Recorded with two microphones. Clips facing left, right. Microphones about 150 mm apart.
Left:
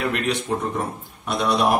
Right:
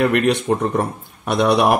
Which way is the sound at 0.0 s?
60° right (ahead or behind).